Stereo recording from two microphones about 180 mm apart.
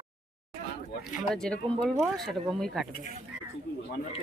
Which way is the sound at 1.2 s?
5° left (ahead or behind).